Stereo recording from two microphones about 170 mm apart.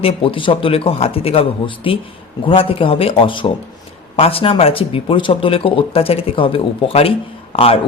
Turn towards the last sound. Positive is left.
turn(degrees=35)  # may be behind; listen again after turning